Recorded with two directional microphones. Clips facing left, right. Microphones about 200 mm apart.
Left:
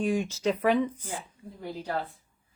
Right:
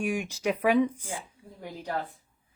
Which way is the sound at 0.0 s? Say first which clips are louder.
Left 2 dB; 15° right (ahead or behind).